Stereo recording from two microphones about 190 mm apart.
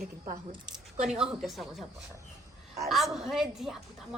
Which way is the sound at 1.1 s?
5° right (ahead or behind).